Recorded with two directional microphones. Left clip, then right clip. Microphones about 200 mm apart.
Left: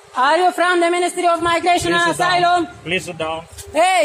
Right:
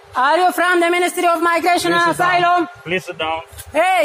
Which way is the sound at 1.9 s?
20° right (ahead or behind).